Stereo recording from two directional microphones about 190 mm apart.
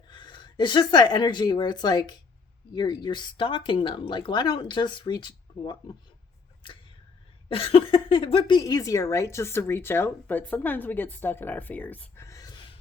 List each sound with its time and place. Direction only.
0.1 s speech: 25° left (ahead or behind)
6.6 s arrow: 25° left (ahead or behind)
7.4 s speech: 30° left (ahead or behind)